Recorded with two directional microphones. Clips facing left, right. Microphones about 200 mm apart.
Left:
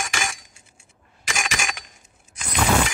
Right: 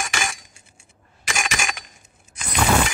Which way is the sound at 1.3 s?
60° right (ahead or behind).